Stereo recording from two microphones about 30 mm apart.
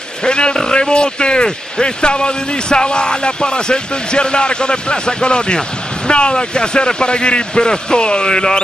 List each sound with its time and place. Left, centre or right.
0.2 s a man's voice: left